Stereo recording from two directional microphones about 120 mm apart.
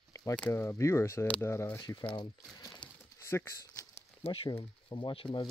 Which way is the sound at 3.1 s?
25° left (ahead or behind).